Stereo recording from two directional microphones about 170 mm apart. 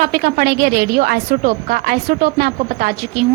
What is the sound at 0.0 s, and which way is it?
A woman's voice, 60° right (ahead or behind).